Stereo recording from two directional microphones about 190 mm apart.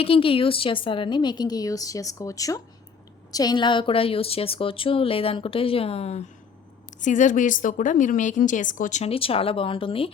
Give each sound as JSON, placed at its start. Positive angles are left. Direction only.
{"t": 0.0, "sound": "a woman's voice", "side_deg": 30}